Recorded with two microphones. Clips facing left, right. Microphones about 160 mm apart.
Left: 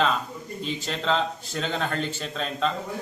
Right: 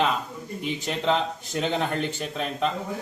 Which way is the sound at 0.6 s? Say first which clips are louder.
Right 3 dB; 15° right (ahead or behind).